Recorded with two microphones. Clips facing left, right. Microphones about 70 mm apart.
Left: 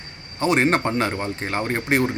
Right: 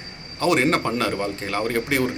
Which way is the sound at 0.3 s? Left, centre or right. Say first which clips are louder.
Even; left.